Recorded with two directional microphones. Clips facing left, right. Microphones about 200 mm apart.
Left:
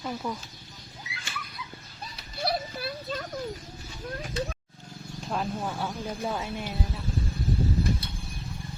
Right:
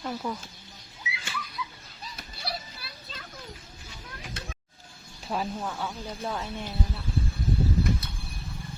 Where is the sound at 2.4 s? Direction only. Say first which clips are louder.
Left 9 dB; 50° left (ahead or behind).